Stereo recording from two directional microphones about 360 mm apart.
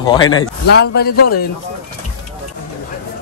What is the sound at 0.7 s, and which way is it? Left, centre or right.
Speech, left.